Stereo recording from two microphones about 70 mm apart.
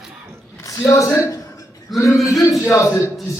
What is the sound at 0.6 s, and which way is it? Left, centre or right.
Speech, left.